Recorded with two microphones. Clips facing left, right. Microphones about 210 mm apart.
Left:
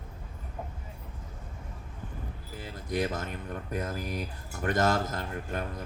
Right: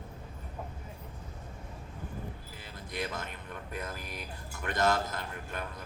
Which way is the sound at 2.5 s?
45° left (ahead or behind).